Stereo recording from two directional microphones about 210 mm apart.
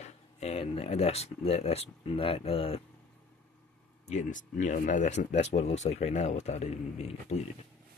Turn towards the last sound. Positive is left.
turn(degrees=30)  # may be behind; listen again after turning